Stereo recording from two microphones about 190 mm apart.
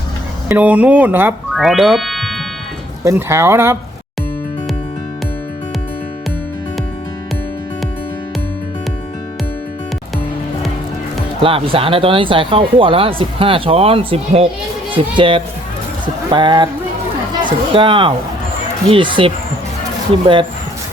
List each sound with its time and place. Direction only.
0.4 s speech: 10° right (ahead or behind)
3.0 s speech: 15° right (ahead or behind)
11.4 s speech: 30° right (ahead or behind)